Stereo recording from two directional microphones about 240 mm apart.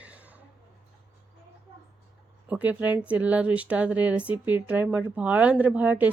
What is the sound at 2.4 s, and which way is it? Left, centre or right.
Speech, centre.